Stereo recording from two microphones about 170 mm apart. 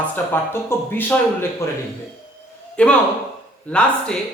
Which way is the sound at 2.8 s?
5° left (ahead or behind).